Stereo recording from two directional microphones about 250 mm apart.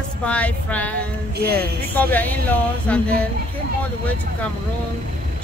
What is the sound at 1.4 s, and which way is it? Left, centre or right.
Speech, right.